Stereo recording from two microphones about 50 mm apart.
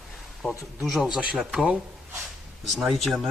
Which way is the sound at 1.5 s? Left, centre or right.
Centre.